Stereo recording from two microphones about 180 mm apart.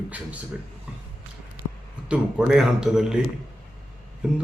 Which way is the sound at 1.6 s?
25° left (ahead or behind).